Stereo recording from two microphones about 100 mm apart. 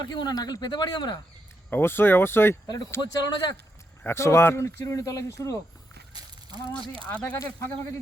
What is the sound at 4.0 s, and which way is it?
Speech, 25° left (ahead or behind).